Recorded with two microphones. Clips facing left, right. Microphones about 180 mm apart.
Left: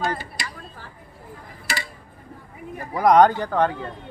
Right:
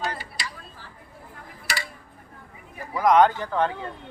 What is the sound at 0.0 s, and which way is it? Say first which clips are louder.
Tick-tock: left 5 dB; 50° left (ahead or behind).